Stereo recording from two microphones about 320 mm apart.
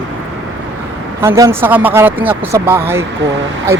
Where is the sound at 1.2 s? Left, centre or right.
Centre.